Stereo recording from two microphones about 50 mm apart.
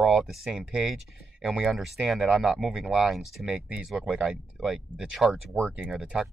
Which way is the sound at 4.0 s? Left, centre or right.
Centre.